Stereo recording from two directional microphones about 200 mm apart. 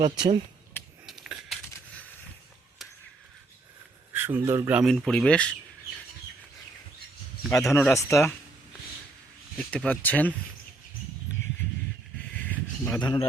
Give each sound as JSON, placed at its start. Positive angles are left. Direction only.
{"t": 0.0, "sound": "speech", "side_deg": -25}
{"t": 1.0, "sound": "a sound", "side_deg": -5}
{"t": 4.1, "sound": "speech", "side_deg": -10}
{"t": 4.8, "sound": "speech", "side_deg": 0}
{"t": 7.7, "sound": "speech", "side_deg": 10}
{"t": 9.6, "sound": "speech", "side_deg": 5}
{"t": 12.4, "sound": "a sound", "side_deg": 10}
{"t": 13.0, "sound": "a man's voice", "side_deg": 20}